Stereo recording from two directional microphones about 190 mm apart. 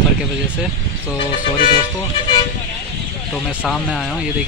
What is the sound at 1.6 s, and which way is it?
Speech, 25° left (ahead or behind).